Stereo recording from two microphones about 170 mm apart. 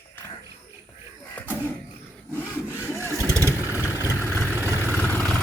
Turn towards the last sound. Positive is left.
turn(degrees=5)  # may be behind; listen again after turning